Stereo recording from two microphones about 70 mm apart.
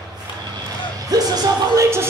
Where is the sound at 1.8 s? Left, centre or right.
Right.